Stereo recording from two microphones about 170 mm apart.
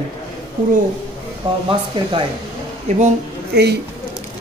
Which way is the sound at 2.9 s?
40° right (ahead or behind).